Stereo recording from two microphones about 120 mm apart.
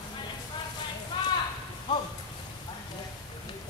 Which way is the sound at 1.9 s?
40° left (ahead or behind).